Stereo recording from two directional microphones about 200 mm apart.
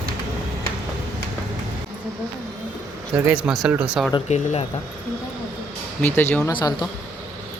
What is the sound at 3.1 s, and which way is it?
Speech, 5° right (ahead or behind).